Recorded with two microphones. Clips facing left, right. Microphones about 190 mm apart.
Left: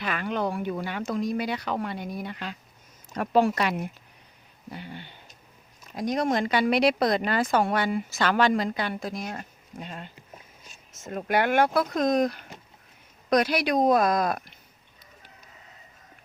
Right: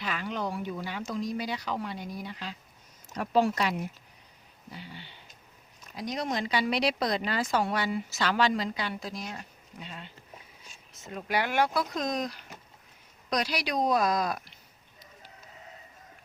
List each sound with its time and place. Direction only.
0.0 s speech: 60° left (ahead or behind)